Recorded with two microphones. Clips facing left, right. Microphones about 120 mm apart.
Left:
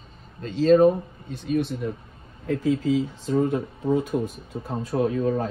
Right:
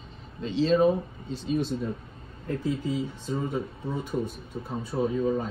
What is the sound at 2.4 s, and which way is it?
Speech, 90° left.